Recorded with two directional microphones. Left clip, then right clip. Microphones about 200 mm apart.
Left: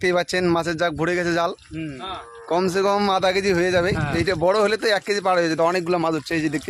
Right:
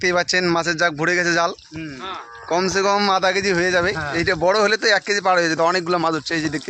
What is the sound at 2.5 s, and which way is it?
Speech, 5° left (ahead or behind).